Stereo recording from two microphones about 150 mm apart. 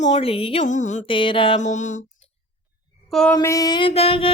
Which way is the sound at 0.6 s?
55° left (ahead or behind).